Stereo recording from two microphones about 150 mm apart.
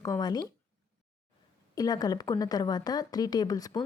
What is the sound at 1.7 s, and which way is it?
Speech, 25° left (ahead or behind).